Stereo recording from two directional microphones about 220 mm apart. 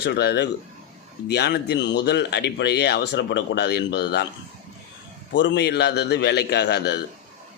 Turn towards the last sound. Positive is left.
turn(degrees=50)  # may be behind; listen again after turning